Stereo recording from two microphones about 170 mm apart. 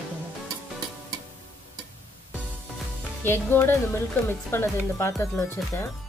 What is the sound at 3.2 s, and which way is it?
Speech, 15° left (ahead or behind).